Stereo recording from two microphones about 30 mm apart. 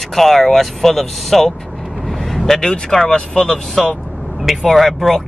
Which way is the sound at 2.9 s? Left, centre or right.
Centre.